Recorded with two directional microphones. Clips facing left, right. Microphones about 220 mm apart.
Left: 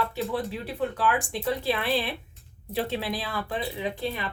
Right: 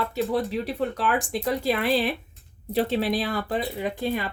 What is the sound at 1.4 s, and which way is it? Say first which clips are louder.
Speech: right 3 dB; 40° right (ahead or behind).